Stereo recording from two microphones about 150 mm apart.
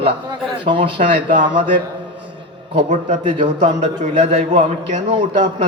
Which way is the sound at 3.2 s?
35° right (ahead or behind).